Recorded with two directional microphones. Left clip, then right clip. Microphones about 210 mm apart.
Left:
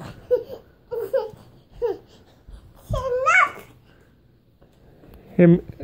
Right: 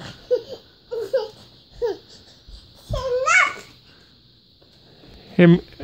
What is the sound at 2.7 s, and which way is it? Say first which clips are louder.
Babbling: right 1 dB; 25° right (ahead or behind).